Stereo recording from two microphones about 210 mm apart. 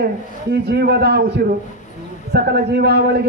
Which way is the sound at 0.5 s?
50° right (ahead or behind).